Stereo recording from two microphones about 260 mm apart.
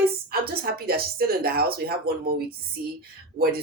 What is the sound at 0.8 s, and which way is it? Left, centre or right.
Speech, right.